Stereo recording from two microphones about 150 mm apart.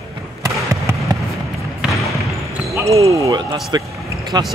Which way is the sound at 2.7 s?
20° right (ahead or behind).